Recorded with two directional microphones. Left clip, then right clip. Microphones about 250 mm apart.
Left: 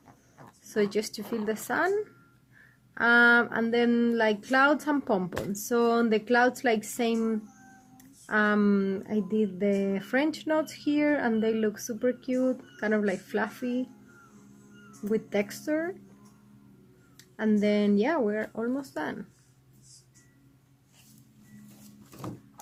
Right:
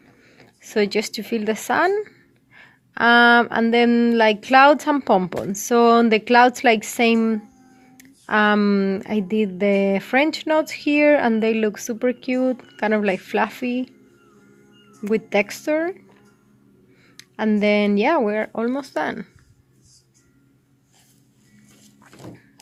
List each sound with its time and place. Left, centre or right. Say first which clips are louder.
0.6 s speech: right 7 dB; right
14.8 s speech: right 7 dB; right
17.2 s speech: right 7 dB; right